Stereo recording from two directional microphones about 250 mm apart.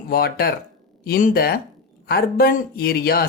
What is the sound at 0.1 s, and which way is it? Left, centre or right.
A woman's voice, left.